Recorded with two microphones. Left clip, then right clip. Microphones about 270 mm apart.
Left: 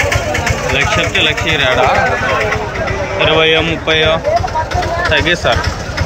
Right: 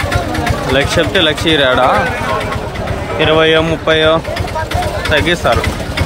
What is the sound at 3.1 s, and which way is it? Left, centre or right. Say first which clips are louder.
Speech: right 1 dB; centre.